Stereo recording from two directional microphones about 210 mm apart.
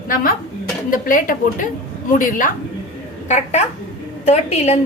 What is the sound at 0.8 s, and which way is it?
A woman's voice, 40° left (ahead or behind).